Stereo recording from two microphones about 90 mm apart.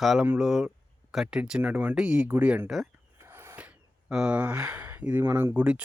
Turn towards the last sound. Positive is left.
turn(degrees=-15)  # may be behind; listen again after turning